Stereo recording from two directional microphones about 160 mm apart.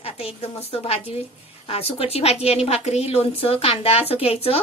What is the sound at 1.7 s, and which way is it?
A woman's voice, 40° left (ahead or behind).